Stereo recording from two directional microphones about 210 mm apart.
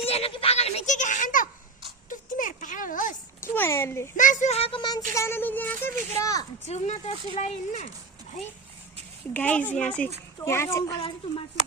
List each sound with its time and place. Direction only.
0.0 s speech: 30° left (ahead or behind)
2.0 s a sound: 40° left (ahead or behind)
3.5 s a child's voice: 10° left (ahead or behind)
4.2 s a child's voice: 35° left (ahead or behind); by 6.4 s 15° left (ahead or behind)
6.7 s speech: 30° left (ahead or behind)
9.3 s a child's voice: 5° left (ahead or behind); by 11.4 s 20° left (ahead or behind)